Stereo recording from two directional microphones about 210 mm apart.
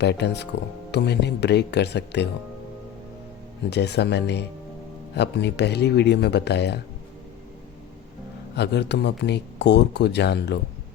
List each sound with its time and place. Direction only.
0.0 s speech: 55° left (ahead or behind)
3.7 s speech: 55° left (ahead or behind)
8.5 s speech: 55° left (ahead or behind)